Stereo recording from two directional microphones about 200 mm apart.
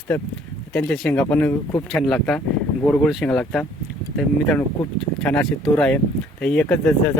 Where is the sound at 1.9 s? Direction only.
Centre (ahead or behind).